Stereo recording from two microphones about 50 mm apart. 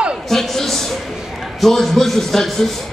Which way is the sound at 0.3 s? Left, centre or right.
Centre.